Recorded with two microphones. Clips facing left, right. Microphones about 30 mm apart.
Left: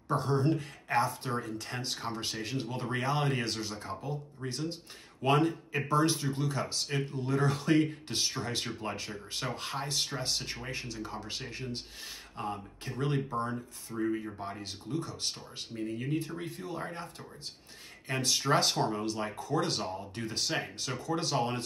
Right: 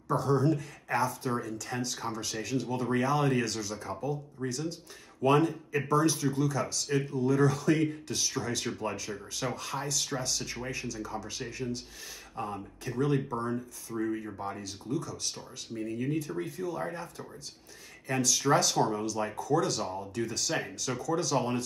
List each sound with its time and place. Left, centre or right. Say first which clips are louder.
0.1 s speech: right 2 dB; left
12.4 s speech: right 1 dB; left
13.9 s speech: even; centre
14.6 s speech: right 2 dB; left
15.7 s speech: right 2 dB; left
16.4 s speech: right 4 dB; left
18.0 s speech: right 2 dB; left